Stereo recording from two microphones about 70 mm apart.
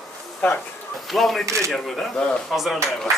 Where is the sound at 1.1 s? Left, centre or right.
Centre.